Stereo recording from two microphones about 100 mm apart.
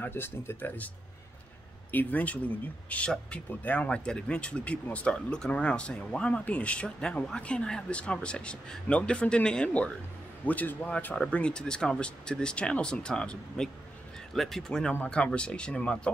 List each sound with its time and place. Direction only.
0.0 s speech: 25° left (ahead or behind)
1.9 s speech: 15° left (ahead or behind)